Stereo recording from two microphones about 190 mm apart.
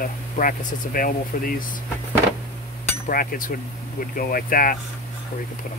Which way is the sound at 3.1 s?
50° left (ahead or behind).